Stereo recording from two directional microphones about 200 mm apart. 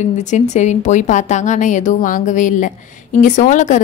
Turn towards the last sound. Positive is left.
turn(degrees=40)  # may be behind; listen again after turning